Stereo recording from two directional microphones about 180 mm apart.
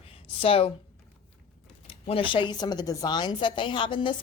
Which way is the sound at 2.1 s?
30° left (ahead or behind).